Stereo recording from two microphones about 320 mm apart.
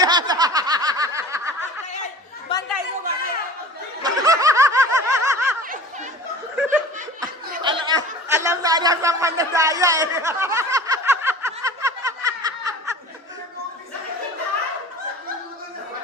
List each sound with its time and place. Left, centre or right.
0.0 s snicker: centre
2.5 s chatter: centre
4.0 s snicker: centre
5.6 s chatter: right
6.6 s laughter: centre
7.6 s chatter: centre